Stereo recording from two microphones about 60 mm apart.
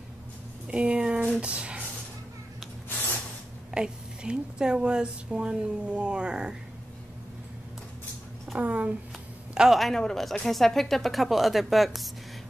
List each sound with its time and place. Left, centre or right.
0.7 s a sound: centre
1.4 s speech: centre
3.7 s a woman's voice: centre
8.5 s speech: right
9.5 s a sound: centre
9.8 s speech: centre